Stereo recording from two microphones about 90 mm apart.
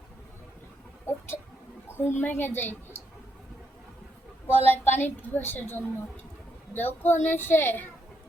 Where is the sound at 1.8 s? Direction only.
25° left (ahead or behind).